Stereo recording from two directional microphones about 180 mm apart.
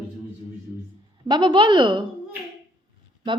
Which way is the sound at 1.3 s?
25° right (ahead or behind).